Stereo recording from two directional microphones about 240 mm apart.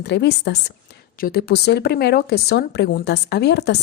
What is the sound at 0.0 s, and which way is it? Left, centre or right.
A woman's voice, left.